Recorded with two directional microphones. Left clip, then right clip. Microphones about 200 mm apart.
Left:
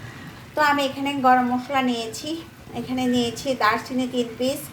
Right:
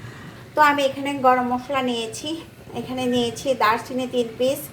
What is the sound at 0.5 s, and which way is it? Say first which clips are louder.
A woman's voice: right 3 dB; 10° right (ahead or behind).